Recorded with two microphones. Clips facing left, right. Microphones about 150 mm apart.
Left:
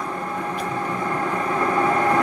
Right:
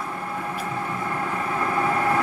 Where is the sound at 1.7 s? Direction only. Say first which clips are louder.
Left 3 dB; 10° right (ahead or behind).